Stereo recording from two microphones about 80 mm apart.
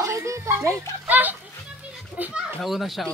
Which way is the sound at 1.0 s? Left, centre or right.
Right.